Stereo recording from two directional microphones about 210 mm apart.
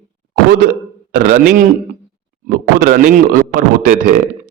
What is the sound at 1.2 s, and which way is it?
A man's voice, 40° right (ahead or behind).